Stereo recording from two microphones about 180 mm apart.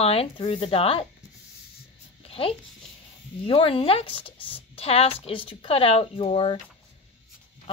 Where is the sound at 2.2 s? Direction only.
30° left (ahead or behind).